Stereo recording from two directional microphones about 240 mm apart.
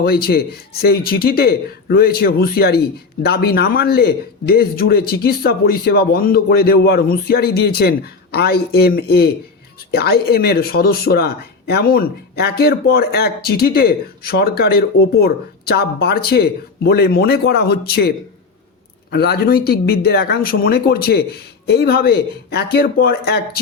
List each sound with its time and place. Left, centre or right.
0.0 s speech: left
19.1 s speech: left